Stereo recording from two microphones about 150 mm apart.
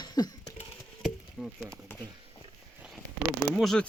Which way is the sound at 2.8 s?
Centre (ahead or behind).